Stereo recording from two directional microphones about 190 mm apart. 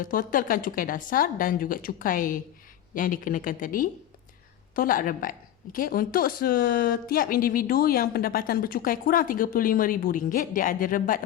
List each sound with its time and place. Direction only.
0.0 s speech: 45° left (ahead or behind)